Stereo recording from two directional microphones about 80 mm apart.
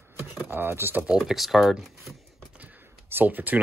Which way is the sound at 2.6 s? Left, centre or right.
Right.